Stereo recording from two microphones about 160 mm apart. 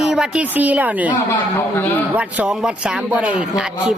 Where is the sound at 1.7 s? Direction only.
10° left (ahead or behind).